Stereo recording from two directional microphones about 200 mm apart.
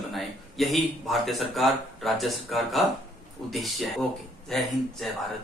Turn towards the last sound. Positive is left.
turn(degrees=0)  # may be behind; listen again after turning